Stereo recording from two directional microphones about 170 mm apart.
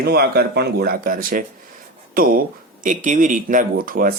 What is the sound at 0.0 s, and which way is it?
Speech, 70° right (ahead or behind).